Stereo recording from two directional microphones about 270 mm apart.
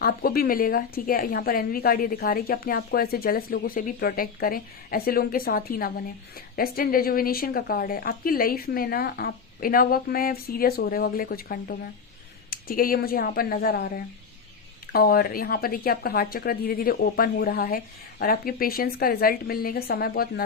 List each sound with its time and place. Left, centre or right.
0.0 s a woman's voice: left